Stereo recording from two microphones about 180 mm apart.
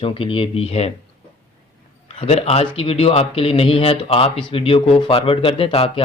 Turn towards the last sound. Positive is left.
turn(degrees=30)  # may be behind; listen again after turning